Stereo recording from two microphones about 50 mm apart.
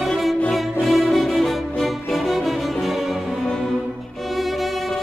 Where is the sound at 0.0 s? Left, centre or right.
Centre.